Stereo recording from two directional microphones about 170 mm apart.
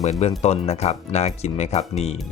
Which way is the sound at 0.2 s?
40° left (ahead or behind).